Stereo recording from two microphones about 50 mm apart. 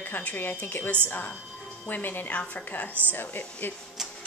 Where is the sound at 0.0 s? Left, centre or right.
Left.